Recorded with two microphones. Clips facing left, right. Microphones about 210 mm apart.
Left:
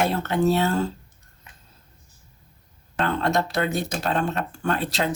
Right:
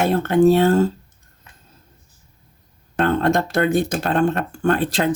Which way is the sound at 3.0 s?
50° right (ahead or behind).